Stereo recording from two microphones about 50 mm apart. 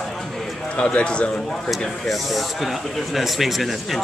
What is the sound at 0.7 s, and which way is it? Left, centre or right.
Speech, centre.